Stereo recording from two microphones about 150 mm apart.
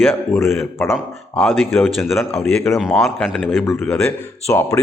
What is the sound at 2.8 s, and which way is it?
A man's voice, 5° right (ahead or behind).